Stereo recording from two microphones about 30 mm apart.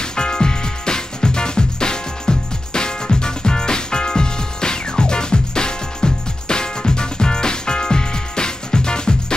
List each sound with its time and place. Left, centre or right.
0.0 s music: left